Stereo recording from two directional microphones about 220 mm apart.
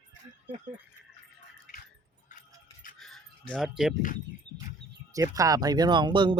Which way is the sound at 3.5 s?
Centre (ahead or behind).